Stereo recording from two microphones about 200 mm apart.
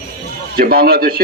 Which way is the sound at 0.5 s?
50° right (ahead or behind).